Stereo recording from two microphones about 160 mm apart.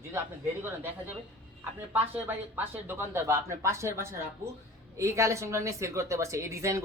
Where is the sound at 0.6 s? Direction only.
15° right (ahead or behind).